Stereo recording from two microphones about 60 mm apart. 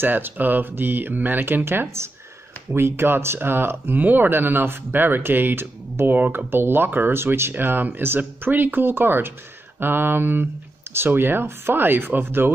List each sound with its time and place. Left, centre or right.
0.0 s speech: right